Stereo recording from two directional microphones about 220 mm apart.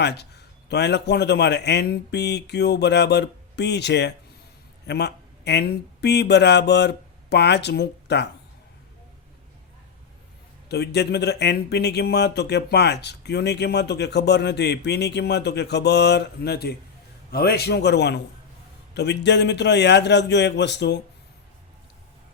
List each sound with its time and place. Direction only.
0.0 s speech: 50° left (ahead or behind)
10.7 s speech: 50° left (ahead or behind)